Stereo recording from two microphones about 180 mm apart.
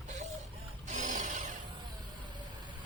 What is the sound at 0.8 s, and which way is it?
Vehicle, 45° right (ahead or behind).